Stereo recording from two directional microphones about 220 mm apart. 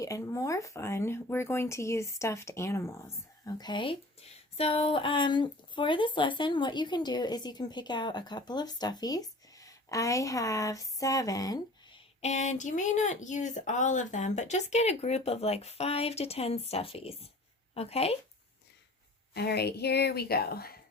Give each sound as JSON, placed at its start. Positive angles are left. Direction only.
{"t": 0.0, "sound": "speech", "side_deg": 15}
{"t": 12.2, "sound": "speech", "side_deg": 30}
{"t": 19.3, "sound": "speech", "side_deg": 45}